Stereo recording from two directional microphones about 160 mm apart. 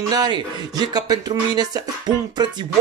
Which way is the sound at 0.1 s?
25° right (ahead or behind).